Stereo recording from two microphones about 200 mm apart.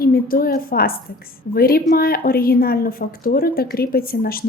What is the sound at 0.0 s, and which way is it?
A woman's voice, 45° left (ahead or behind).